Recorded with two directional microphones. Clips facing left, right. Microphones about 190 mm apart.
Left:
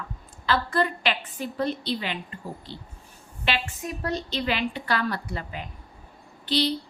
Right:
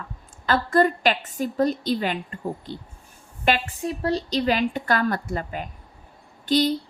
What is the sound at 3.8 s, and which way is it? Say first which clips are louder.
A woman's voice: right 5 dB; 30° right (ahead or behind).